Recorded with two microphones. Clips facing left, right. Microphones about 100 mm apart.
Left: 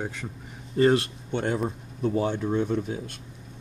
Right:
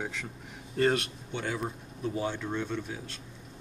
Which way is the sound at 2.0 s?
55° left (ahead or behind).